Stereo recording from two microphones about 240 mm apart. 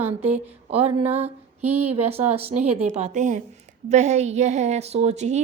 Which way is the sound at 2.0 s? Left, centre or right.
Right.